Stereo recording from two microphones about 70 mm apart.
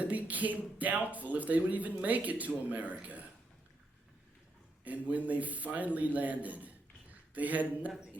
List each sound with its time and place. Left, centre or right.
0.0 s speech: right
4.8 s a man's voice: right